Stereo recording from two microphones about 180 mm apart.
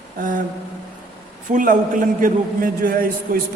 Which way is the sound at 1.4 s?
45° right (ahead or behind).